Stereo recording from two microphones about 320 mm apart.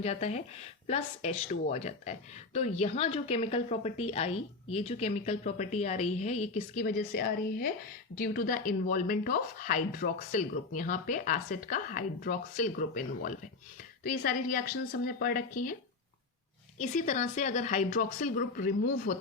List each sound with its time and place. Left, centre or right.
0.0 s speech: left
16.8 s speech: left